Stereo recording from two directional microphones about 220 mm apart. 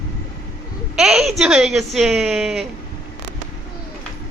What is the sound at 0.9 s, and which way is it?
A woman's voice, centre (ahead or behind).